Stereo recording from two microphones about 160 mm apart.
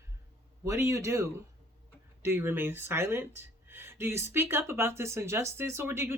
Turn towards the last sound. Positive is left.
turn(degrees=-15)  # may be behind; listen again after turning